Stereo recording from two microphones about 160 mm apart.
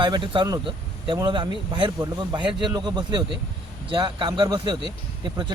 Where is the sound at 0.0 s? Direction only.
30° right (ahead or behind).